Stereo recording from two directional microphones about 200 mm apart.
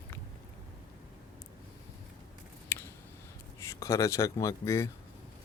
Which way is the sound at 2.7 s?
10° left (ahead or behind).